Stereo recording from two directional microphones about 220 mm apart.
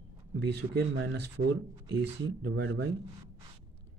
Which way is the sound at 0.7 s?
50° right (ahead or behind).